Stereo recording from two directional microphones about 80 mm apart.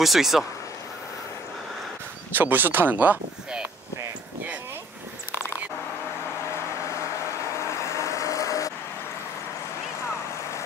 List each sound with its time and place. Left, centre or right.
0.0 s speech: centre
2.3 s speech: right
7.5 s vehicle: left